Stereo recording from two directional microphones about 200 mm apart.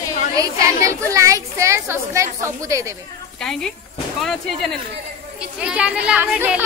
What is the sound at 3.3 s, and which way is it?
Speech, 5° left (ahead or behind).